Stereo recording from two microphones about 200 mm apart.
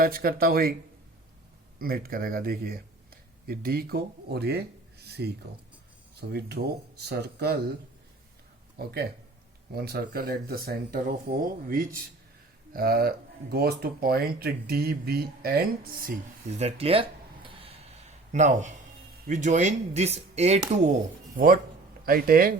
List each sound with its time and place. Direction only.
0.0 s speech: 50° right (ahead or behind)
1.8 s speech: 45° right (ahead or behind)
8.8 s speech: 50° right (ahead or behind)
16.6 s a sound: 30° right (ahead or behind)
18.3 s speech: 35° right (ahead or behind)